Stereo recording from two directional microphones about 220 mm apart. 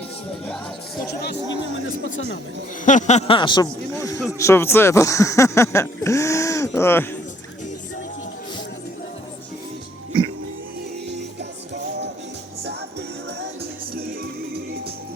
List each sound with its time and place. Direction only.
2.8 s speech: 35° left (ahead or behind); by 7.2 s 10° left (ahead or behind)
12.6 s music: 50° right (ahead or behind)